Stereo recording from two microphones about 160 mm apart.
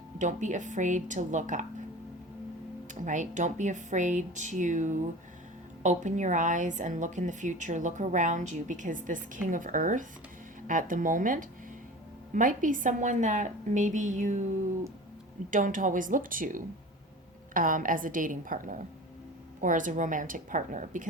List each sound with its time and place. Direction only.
0.2 s a woman's voice: 50° right (ahead or behind)
2.9 s a woman's voice: 50° right (ahead or behind)
15.4 s a woman's voice: 55° right (ahead or behind)